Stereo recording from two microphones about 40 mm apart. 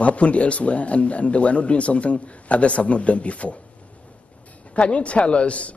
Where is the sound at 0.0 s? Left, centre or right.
Left.